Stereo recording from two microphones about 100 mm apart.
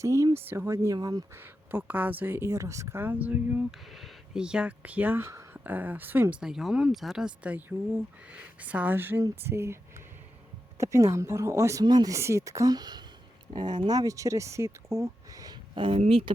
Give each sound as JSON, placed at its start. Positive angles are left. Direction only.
{"t": 0.0, "sound": "speech", "side_deg": -30}
{"t": 0.9, "sound": "speech", "side_deg": -40}
{"t": 1.4, "sound": "speech", "side_deg": -20}
{"t": 3.7, "sound": "speech", "side_deg": 0}
{"t": 5.6, "sound": "speech", "side_deg": -15}
{"t": 6.4, "sound": "speech", "side_deg": -5}
{"t": 10.8, "sound": "speech", "side_deg": -30}
{"t": 15.7, "sound": "speech", "side_deg": -60}